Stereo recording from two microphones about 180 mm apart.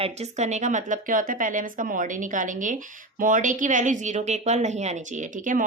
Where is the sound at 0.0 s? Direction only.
35° right (ahead or behind).